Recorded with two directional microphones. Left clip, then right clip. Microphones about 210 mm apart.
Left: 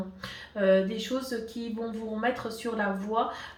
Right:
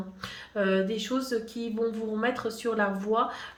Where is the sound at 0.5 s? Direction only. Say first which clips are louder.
Left 3 dB; 50° right (ahead or behind).